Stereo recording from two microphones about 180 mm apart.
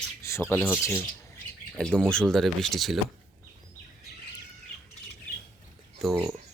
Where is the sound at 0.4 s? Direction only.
5° left (ahead or behind).